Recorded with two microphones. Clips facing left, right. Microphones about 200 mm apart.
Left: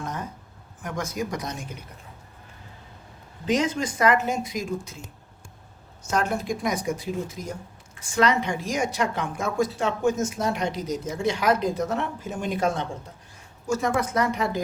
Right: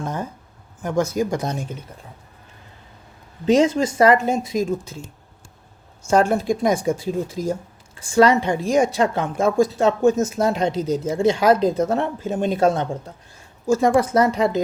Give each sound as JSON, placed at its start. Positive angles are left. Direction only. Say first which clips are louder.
{"t": 0.0, "sound": "a sound", "louder": "right 6 dB", "side_deg": -30}
{"t": 0.8, "sound": "speech", "louder": "right 9 dB", "side_deg": -30}
{"t": 3.4, "sound": "speech", "louder": "right 8 dB", "side_deg": -25}
{"t": 6.1, "sound": "speech", "louder": "right 8 dB", "side_deg": -30}
{"t": 13.8, "sound": "a woman's voice", "louder": "right 8 dB", "side_deg": -30}